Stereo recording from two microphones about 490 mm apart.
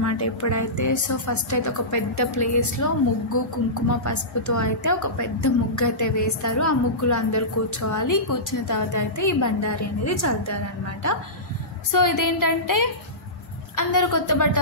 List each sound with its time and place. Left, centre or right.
0.0 s a woman's voice: left